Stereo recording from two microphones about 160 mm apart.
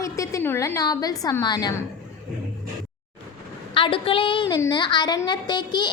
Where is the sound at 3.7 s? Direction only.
35° left (ahead or behind).